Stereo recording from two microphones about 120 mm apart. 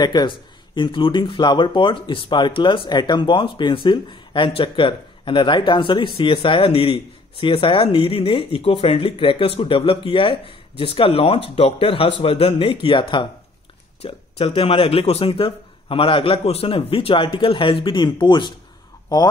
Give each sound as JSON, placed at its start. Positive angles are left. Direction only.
{"t": 0.0, "sound": "speech", "side_deg": 40}